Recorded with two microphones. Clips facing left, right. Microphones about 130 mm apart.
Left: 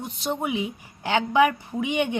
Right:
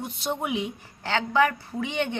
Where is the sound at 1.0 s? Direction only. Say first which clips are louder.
Left 3 dB; 15° left (ahead or behind).